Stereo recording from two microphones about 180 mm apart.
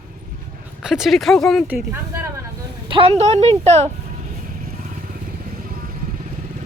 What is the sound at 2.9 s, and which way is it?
A woman's voice, 35° right (ahead or behind).